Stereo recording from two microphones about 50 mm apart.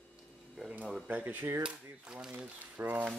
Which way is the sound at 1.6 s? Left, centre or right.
Centre.